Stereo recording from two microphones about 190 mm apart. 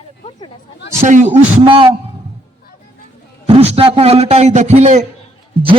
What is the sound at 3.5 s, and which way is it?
A man's voice, 30° right (ahead or behind).